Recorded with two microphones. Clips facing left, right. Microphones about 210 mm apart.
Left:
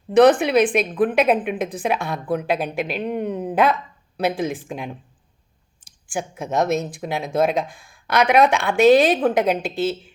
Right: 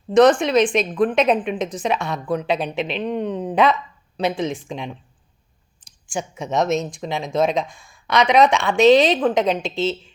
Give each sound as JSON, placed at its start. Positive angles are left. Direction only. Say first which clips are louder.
{"t": 0.3, "sound": "a woman's voice", "louder": "even", "side_deg": 5}
{"t": 6.1, "sound": "speech", "louder": "even", "side_deg": 0}